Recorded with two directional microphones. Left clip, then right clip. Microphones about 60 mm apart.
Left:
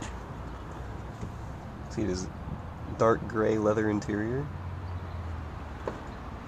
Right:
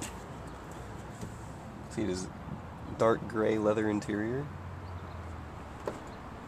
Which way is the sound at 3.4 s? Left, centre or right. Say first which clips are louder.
Left 2 dB; right.